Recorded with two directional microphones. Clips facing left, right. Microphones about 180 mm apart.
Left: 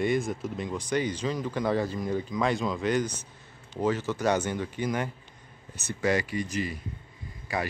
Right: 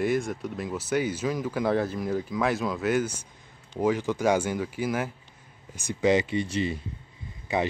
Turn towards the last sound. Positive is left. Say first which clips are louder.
# right 4 dB
turn(degrees=-20)  # may be behind; listen again after turning